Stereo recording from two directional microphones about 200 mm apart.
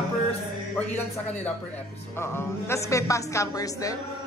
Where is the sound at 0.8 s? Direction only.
10° left (ahead or behind).